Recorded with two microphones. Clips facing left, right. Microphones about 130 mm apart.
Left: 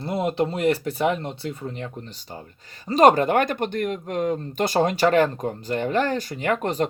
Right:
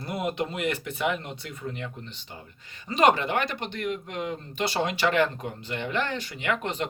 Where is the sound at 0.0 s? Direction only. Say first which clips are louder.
Left 6 dB; 25° left (ahead or behind).